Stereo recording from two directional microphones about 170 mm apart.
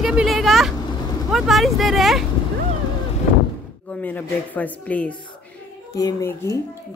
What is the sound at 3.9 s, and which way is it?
Speech, 10° left (ahead or behind).